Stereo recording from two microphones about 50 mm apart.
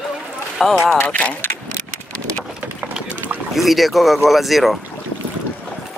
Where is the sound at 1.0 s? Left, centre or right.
Left.